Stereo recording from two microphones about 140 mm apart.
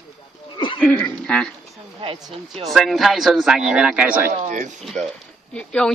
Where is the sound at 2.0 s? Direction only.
45° right (ahead or behind).